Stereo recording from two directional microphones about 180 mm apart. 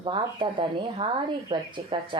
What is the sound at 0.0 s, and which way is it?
A woman's voice, 30° right (ahead or behind).